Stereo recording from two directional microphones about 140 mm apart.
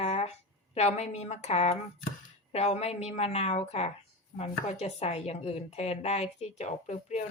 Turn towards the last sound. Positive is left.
turn(degrees=55)  # may be behind; listen again after turning